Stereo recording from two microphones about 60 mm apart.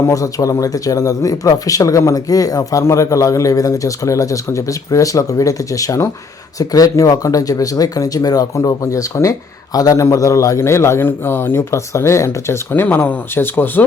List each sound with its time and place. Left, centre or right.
0.1 s speech: left
2.8 s speech: left
6.6 s speech: left
9.7 s a man's voice: left
10.6 s speech: left
11.7 s speech: left
12.7 s speech: left